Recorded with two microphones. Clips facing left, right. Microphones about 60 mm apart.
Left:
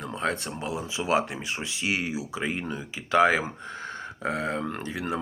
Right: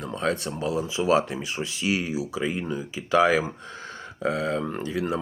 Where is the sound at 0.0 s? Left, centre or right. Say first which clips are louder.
Right 2 dB; left.